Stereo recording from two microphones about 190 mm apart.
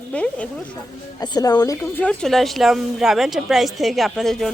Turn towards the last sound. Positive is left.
turn(degrees=0)  # may be behind; listen again after turning